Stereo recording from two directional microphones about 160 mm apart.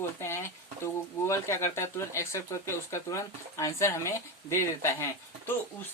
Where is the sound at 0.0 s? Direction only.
15° left (ahead or behind).